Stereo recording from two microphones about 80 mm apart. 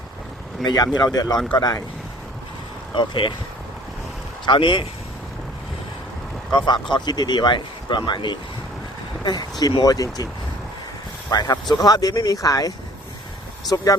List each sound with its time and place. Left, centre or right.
0.6 s speech: left
2.9 s speech: left
4.4 s speech: left
6.9 s speech: left
9.2 s speech: left
11.3 s speech: left